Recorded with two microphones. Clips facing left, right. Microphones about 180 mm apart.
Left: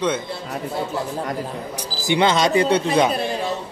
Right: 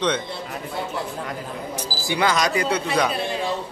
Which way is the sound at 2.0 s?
25° left (ahead or behind).